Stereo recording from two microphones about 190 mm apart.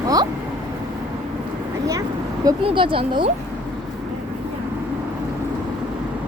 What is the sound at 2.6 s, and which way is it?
Speech, 25° right (ahead or behind).